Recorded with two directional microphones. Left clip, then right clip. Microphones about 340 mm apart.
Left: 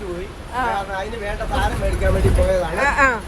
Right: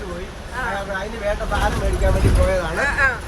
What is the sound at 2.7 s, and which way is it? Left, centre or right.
Speech, centre.